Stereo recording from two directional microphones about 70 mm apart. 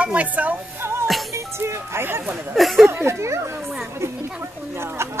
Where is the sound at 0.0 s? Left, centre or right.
Right.